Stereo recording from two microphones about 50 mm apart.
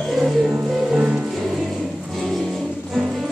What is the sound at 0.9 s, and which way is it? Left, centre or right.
Music, right.